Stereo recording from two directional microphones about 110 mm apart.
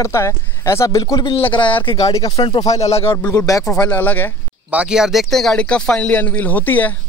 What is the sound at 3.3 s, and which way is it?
Speech, 35° left (ahead or behind).